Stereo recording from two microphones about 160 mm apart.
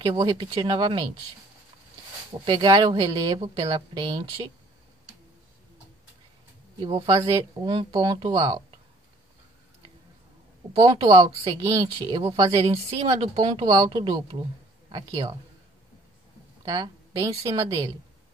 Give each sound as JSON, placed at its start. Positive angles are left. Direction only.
{"t": 0.0, "sound": "speech", "side_deg": -25}
{"t": 2.4, "sound": "speech", "side_deg": -30}
{"t": 6.8, "sound": "a woman's voice", "side_deg": -35}
{"t": 10.8, "sound": "a man's voice", "side_deg": -25}
{"t": 16.6, "sound": "a woman's voice", "side_deg": -25}
{"t": 17.5, "sound": "a woman's voice", "side_deg": -35}